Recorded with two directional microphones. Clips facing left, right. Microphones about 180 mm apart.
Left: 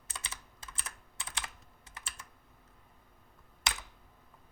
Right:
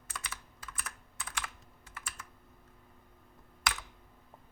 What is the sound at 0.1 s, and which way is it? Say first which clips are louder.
Computer keyboard: right 2 dB; 25° left (ahead or behind).